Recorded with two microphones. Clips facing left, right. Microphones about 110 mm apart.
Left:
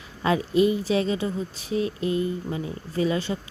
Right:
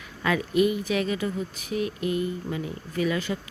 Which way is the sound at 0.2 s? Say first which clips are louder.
Left 2 dB; 30° left (ahead or behind).